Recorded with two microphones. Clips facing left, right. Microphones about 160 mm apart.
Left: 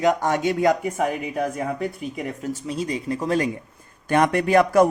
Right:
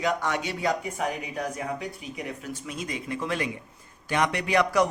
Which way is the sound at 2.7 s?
35° left (ahead or behind).